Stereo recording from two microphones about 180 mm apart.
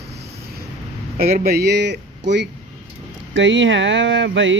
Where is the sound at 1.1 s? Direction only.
60° right (ahead or behind).